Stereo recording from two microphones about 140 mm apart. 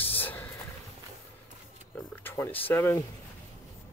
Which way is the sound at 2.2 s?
15° left (ahead or behind).